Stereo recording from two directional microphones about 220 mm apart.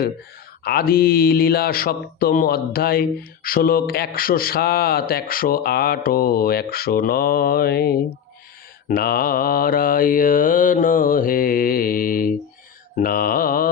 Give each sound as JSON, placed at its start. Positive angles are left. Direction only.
{"t": 0.6, "sound": "mantra", "side_deg": 45}